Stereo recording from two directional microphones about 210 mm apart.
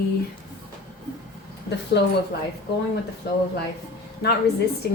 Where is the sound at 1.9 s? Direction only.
55° left (ahead or behind).